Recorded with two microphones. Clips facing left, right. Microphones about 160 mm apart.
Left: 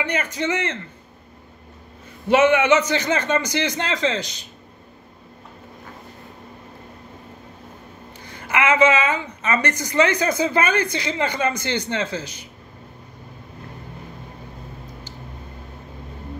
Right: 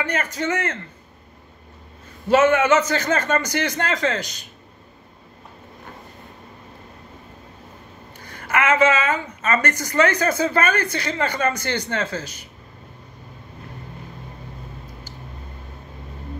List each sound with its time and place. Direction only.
0.0 s a woman's voice: 15° left (ahead or behind)
2.2 s a woman's voice: 15° left (ahead or behind)
8.3 s a woman's voice: 20° left (ahead or behind)